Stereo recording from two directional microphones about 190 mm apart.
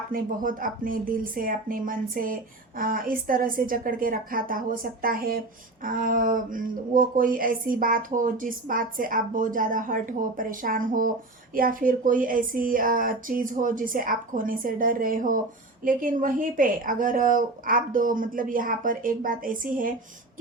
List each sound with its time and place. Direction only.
0.1 s speech: 45° right (ahead or behind)